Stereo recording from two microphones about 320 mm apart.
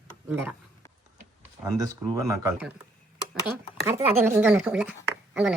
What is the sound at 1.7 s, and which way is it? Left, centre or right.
Speech, centre.